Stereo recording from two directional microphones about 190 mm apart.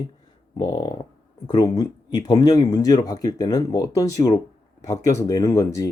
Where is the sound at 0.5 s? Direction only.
20° left (ahead or behind).